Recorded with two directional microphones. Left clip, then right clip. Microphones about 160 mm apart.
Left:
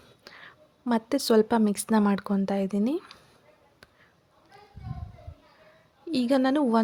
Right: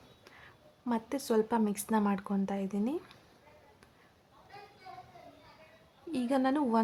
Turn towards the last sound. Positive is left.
turn(degrees=25)  # may be behind; listen again after turning